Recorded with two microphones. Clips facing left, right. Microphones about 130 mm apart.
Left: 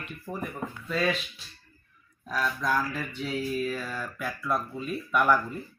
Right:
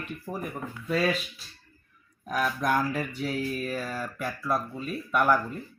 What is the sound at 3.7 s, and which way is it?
Speech, 40° right (ahead or behind).